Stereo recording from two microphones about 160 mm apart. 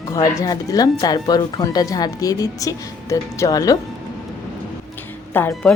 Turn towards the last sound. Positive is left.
turn(degrees=10)  # may be behind; listen again after turning